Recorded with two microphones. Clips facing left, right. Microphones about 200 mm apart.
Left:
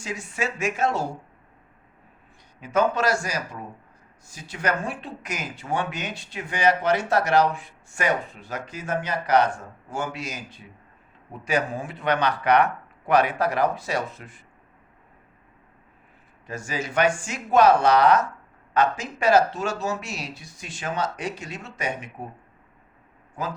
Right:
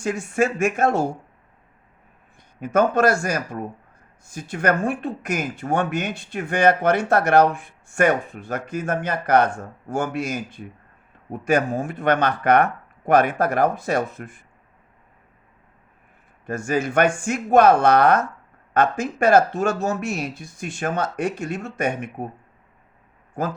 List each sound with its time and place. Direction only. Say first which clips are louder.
0.0 s speech: right 8 dB; 55° right (ahead or behind)
2.6 s speech: right 4 dB; 50° right (ahead or behind)
16.5 s speech: right 8 dB; 50° right (ahead or behind)
23.4 s speech: right 5 dB; 50° right (ahead or behind)